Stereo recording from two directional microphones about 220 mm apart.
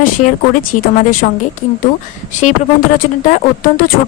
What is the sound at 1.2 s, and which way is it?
Speech, 40° left (ahead or behind).